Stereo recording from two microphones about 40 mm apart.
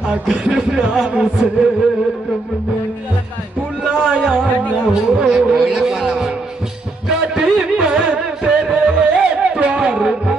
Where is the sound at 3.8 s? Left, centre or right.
Centre.